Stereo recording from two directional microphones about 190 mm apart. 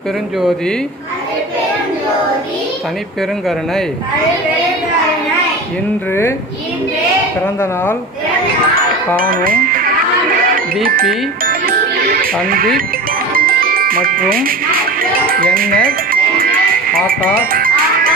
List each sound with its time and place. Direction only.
9.1 s speech: 50° right (ahead or behind)
11.4 s music: 50° right (ahead or behind)
12.5 s speech: 50° right (ahead or behind)
13.3 s music: 50° right (ahead or behind)